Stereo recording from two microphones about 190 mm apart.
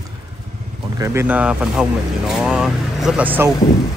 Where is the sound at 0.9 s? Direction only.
15° right (ahead or behind).